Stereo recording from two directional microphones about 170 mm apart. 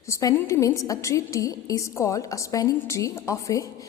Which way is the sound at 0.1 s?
20° left (ahead or behind).